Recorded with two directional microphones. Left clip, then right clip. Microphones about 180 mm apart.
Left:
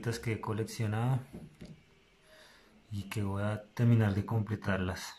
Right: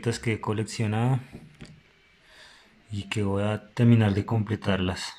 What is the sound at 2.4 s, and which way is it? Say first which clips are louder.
Speech: right 8 dB; 10° right (ahead or behind).